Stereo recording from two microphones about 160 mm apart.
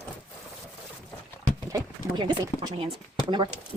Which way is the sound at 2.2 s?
30° right (ahead or behind).